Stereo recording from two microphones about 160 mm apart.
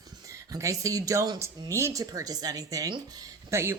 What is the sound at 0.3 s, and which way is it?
Speech, 20° right (ahead or behind).